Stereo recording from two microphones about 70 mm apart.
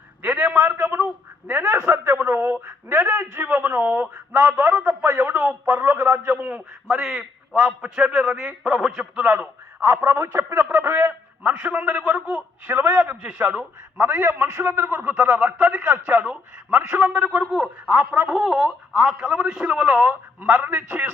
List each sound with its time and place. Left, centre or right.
0.2 s a sound: centre
0.9 s a sound: right
1.8 s a man's voice: right
5.3 s a man's voice: right
5.6 s a man's voice: right
6.3 s a man's voice: right
6.9 s a man's voice: centre
9.3 s a man's voice: right